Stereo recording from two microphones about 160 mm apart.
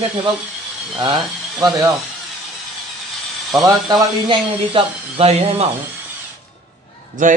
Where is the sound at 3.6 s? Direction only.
25° right (ahead or behind).